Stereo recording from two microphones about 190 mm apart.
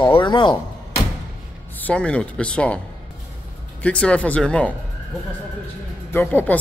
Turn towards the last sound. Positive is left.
turn(degrees=10)  # may be behind; listen again after turning